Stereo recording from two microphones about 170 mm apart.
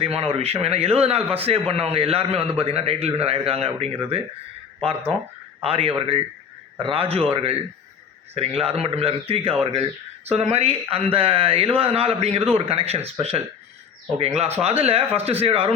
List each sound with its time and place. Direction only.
0.0 s a man's voice: 35° right (ahead or behind)
5.6 s a man's voice: 35° right (ahead or behind)